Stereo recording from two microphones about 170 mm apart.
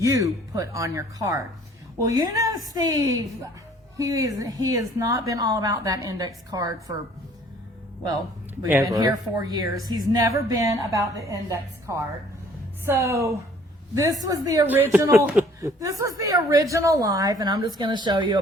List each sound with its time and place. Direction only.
0.0 s a woman's voice: 20° right (ahead or behind)
8.6 s a woman's voice: 15° right (ahead or behind)